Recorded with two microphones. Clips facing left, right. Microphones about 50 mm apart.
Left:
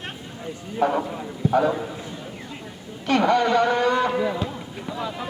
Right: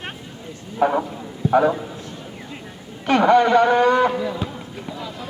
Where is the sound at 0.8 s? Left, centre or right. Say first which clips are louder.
Right 3 dB; right.